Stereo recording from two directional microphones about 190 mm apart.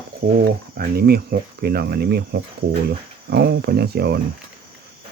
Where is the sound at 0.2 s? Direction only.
55° right (ahead or behind).